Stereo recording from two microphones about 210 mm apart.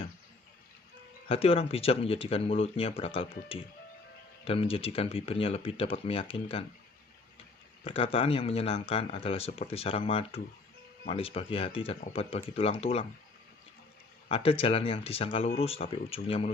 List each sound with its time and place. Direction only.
1.3 s speech: 25° left (ahead or behind)
4.4 s speech: 25° left (ahead or behind)
7.9 s speech: 25° left (ahead or behind)
14.3 s speech: 25° left (ahead or behind)